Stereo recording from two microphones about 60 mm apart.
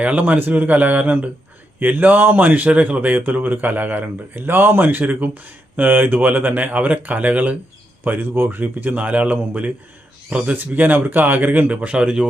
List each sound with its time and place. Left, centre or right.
0.0 s speech: right